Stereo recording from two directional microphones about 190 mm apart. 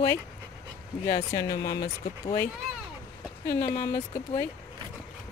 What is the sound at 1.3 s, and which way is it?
Speech, 20° left (ahead or behind).